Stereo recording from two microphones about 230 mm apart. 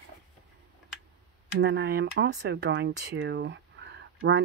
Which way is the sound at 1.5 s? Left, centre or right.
Right.